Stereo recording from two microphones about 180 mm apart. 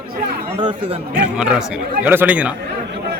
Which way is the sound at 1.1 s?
5° right (ahead or behind).